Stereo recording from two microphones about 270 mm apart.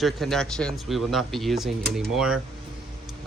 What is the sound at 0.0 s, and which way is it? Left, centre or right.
Speech, centre.